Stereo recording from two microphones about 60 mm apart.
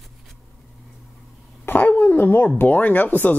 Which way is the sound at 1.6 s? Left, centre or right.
Left.